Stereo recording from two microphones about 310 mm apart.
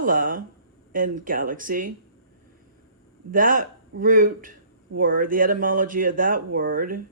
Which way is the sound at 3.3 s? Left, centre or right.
Right.